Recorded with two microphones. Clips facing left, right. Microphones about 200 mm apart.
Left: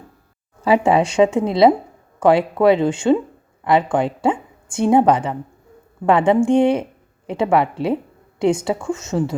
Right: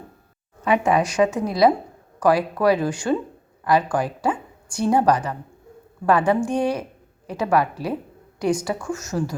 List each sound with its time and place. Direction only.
0.6 s a woman's voice: 30° left (ahead or behind)